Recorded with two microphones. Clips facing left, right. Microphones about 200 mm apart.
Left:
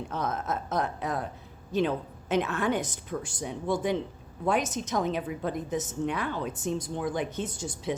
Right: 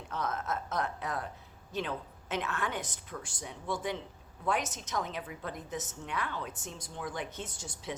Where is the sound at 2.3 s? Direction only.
20° left (ahead or behind).